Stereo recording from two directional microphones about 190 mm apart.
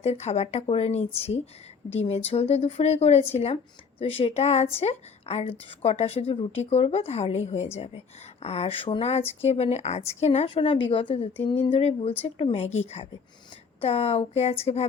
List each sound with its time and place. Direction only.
0.0 s a woman's voice: 35° left (ahead or behind)